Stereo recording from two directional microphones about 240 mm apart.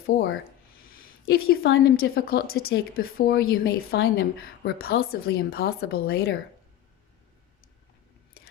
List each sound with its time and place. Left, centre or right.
0.1 s a woman's voice: left
1.6 s a woman's voice: left